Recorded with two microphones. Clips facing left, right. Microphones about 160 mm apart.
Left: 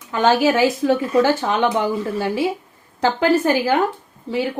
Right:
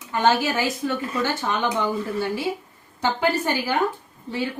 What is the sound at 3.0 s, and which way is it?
Speech, 90° left.